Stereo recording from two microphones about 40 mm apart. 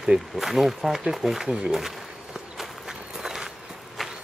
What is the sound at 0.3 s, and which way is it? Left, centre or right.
Speech, centre.